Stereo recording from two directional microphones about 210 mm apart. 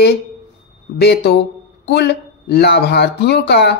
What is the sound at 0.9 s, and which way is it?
Speech, 50° left (ahead or behind).